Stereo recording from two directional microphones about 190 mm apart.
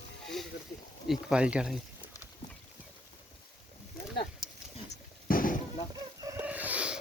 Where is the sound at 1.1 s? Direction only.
5° right (ahead or behind).